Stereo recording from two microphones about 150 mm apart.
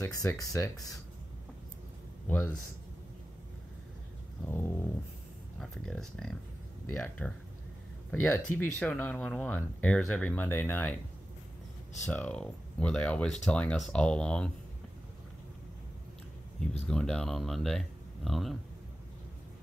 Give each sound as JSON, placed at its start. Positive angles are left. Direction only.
{"t": 0.0, "sound": "speech", "side_deg": 20}
{"t": 2.2, "sound": "a man's voice", "side_deg": 10}
{"t": 4.5, "sound": "speech", "side_deg": 15}
{"t": 5.6, "sound": "speech", "side_deg": 5}
{"t": 12.1, "sound": "speech", "side_deg": 5}
{"t": 16.8, "sound": "speech", "side_deg": 5}